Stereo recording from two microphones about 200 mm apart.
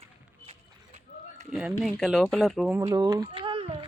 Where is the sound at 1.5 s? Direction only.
Centre (ahead or behind).